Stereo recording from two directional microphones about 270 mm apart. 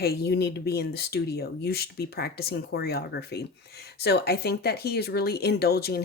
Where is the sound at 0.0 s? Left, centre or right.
Left.